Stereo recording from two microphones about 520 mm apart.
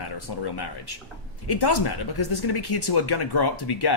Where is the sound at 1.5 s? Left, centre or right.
Left.